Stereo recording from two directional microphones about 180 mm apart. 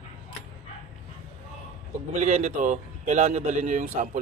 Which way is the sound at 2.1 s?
35° right (ahead or behind).